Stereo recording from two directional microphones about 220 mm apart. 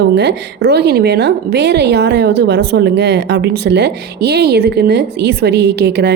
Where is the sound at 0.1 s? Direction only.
50° right (ahead or behind).